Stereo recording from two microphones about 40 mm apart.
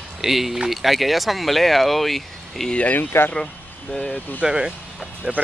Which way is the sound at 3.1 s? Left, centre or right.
Left.